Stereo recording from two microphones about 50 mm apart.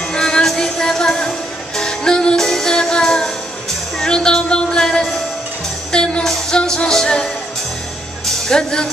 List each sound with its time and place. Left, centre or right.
0.1 s music: centre
8.3 s music: centre